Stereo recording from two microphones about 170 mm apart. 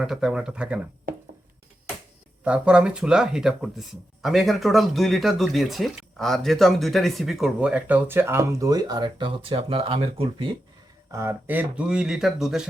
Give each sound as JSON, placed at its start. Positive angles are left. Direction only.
{"t": 0.0, "sound": "speech", "side_deg": -5}
{"t": 2.4, "sound": "speech", "side_deg": -5}
{"t": 11.1, "sound": "speech", "side_deg": -15}